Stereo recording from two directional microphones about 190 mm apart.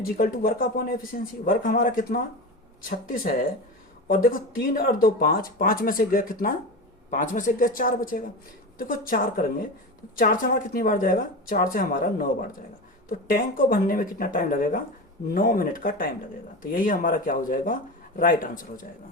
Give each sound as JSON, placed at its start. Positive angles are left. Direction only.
{"t": 0.0, "sound": "speech", "side_deg": 50}